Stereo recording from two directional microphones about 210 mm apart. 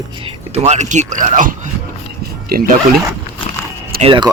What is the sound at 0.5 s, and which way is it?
Speech, 30° right (ahead or behind).